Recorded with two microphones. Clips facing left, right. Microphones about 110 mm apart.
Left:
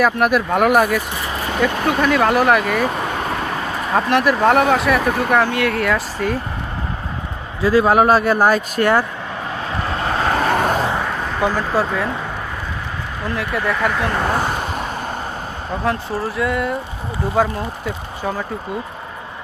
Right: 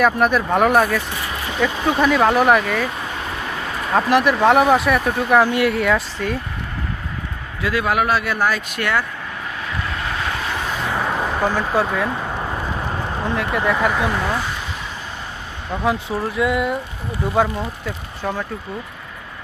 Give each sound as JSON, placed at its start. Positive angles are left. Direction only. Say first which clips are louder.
{"t": 0.0, "sound": "speech", "louder": "left 1 dB", "side_deg": 5}
{"t": 3.9, "sound": "speech", "louder": "even", "side_deg": 0}
{"t": 7.6, "sound": "a man's voice", "louder": "left 6 dB", "side_deg": 35}
{"t": 9.6, "sound": "vehicle", "louder": "left 5 dB", "side_deg": 35}
{"t": 11.4, "sound": "speech", "louder": "left 2 dB", "side_deg": 5}
{"t": 13.2, "sound": "speech", "louder": "right 1 dB", "side_deg": 0}
{"t": 14.3, "sound": "vehicle", "louder": "left 5 dB", "side_deg": 50}
{"t": 15.7, "sound": "speech", "louder": "right 1 dB", "side_deg": 0}